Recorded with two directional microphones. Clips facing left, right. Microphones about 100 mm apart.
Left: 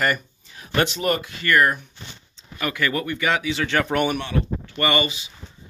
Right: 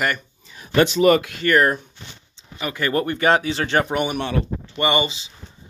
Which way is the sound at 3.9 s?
15° right (ahead or behind).